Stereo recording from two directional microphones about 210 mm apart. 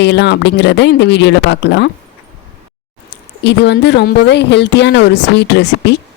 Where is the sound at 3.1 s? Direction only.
55° left (ahead or behind).